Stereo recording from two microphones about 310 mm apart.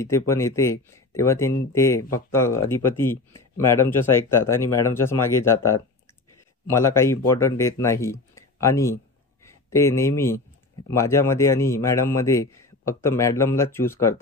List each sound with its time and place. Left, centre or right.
0.3 s a man's voice: centre